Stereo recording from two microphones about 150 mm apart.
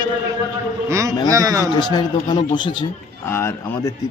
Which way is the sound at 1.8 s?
30° left (ahead or behind).